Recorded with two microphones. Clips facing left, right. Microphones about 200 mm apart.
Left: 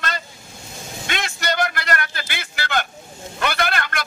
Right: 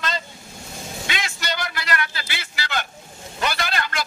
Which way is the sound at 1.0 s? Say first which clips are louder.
Left 5 dB; 50° left (ahead or behind).